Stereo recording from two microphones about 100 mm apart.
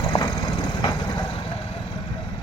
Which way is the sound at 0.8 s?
40° left (ahead or behind).